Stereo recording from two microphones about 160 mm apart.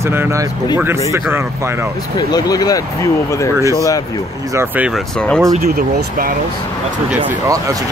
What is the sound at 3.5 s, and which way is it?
Speech, 20° right (ahead or behind).